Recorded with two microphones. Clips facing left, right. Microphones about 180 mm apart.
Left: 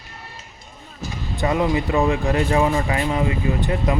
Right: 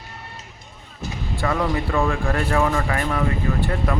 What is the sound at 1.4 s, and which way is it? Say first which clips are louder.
Speech: left 3 dB; 20° left (ahead or behind).